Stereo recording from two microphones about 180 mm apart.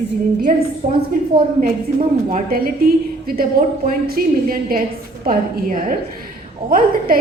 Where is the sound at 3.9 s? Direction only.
55° right (ahead or behind).